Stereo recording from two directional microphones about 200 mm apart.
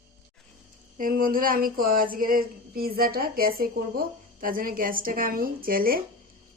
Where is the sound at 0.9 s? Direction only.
45° right (ahead or behind).